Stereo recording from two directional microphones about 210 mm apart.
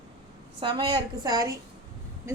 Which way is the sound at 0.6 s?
20° right (ahead or behind).